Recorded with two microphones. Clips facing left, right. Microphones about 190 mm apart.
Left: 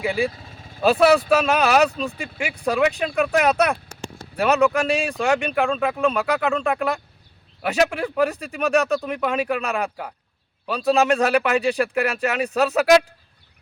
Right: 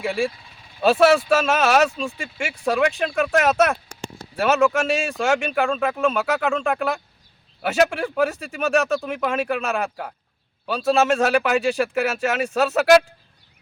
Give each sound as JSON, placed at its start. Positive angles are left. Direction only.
{"t": 0.0, "sound": "speech", "side_deg": 0}
{"t": 0.3, "sound": "vehicle", "side_deg": 45}
{"t": 0.8, "sound": "speech", "side_deg": 0}